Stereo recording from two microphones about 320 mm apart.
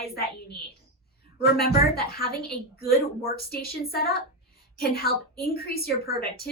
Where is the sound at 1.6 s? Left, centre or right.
Left.